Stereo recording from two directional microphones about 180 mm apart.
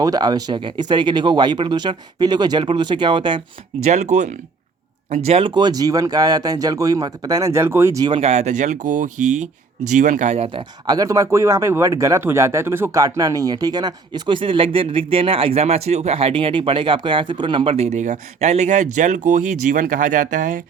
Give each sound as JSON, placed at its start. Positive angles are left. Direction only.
{"t": 0.0, "sound": "speech", "side_deg": -20}
{"t": 3.8, "sound": "speech", "side_deg": -40}
{"t": 8.2, "sound": "speech", "side_deg": -35}
{"t": 10.8, "sound": "speech", "side_deg": -20}